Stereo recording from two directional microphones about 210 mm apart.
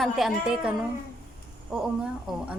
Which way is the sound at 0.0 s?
Centre (ahead or behind).